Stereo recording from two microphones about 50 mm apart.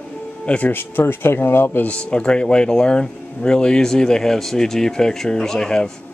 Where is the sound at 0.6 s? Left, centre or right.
Left.